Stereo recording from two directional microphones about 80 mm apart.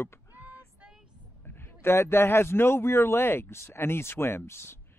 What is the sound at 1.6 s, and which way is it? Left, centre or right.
Speech, left.